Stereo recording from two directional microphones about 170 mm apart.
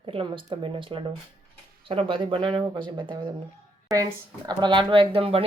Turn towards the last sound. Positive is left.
turn(degrees=-35)  # may be behind; listen again after turning